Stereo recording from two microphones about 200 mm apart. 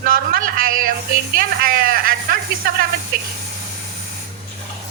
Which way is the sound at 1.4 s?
45° right (ahead or behind).